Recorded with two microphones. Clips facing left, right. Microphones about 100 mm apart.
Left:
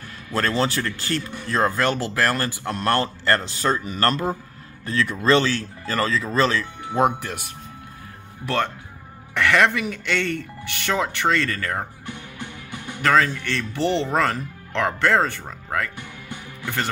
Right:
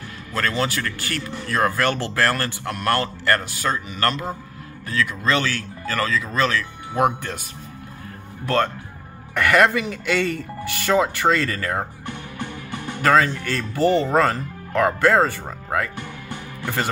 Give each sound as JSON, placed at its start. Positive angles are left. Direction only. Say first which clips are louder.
{"t": 0.4, "sound": "speech", "louder": "left 1 dB", "side_deg": 35}
{"t": 2.7, "sound": "a man's voice", "louder": "even", "side_deg": 25}
{"t": 9.3, "sound": "speech", "louder": "right 2 dB", "side_deg": -5}
{"t": 13.0, "sound": "speech", "louder": "right 2 dB", "side_deg": -5}
{"t": 16.3, "sound": "music", "louder": "right 1 dB", "side_deg": -10}